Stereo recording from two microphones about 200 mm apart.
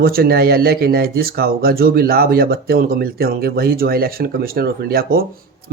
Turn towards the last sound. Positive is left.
turn(degrees=-50)  # may be behind; listen again after turning